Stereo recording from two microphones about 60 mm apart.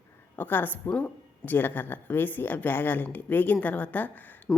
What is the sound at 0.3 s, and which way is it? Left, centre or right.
Speech, left.